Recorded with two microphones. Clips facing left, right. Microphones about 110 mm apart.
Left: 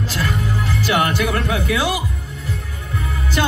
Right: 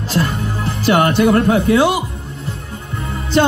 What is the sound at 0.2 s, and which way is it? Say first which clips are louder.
Music: right 1 dB; 30° right (ahead or behind).